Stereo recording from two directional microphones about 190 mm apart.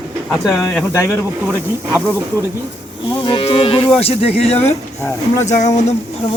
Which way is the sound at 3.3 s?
30° left (ahead or behind).